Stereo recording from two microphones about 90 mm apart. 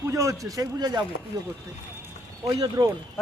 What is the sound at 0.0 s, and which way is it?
A man's voice, 35° right (ahead or behind).